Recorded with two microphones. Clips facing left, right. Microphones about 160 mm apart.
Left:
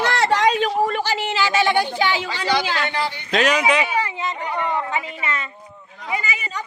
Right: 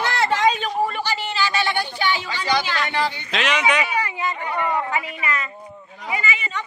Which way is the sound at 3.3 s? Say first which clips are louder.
Left 4 dB; 40° left (ahead or behind).